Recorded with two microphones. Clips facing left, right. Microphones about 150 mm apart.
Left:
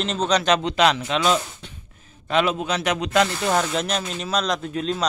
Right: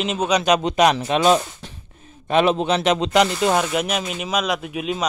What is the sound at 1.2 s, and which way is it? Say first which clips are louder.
Speech: right 5 dB; 40° right (ahead or behind).